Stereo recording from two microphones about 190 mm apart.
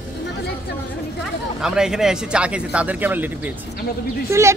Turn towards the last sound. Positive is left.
turn(degrees=-15)  # may be behind; listen again after turning